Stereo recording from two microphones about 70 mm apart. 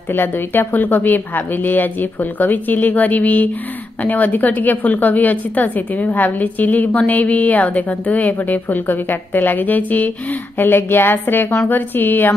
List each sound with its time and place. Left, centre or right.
0.1 s a woman's voice: left